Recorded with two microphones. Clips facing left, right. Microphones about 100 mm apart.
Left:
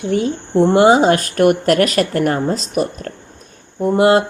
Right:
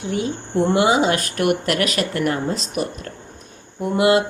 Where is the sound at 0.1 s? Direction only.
45° left (ahead or behind).